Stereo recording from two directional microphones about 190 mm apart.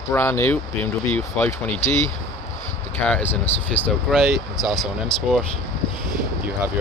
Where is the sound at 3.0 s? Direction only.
10° left (ahead or behind).